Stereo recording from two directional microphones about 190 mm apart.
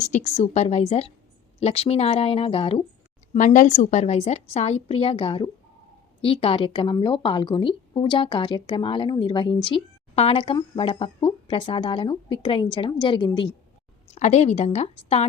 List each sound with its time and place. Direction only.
0.0 s speech: 40° left (ahead or behind)
3.3 s a woman's voice: 40° left (ahead or behind); by 13.5 s 25° left (ahead or behind)
14.2 s speech: 35° left (ahead or behind)